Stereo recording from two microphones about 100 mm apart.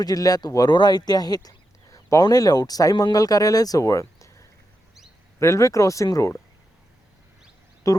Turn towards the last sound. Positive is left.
turn(degrees=35)  # may be behind; listen again after turning